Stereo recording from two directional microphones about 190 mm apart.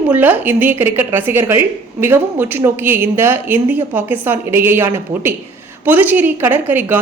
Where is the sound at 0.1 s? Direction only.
10° right (ahead or behind).